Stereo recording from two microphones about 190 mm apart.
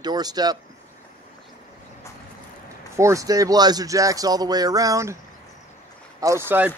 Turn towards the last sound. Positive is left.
turn(degrees=-10)  # may be behind; listen again after turning